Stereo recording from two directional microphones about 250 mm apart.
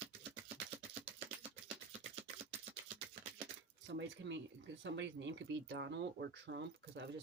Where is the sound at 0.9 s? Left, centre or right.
Right.